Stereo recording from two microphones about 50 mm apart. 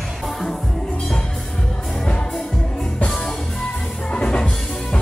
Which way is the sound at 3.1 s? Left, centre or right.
Centre.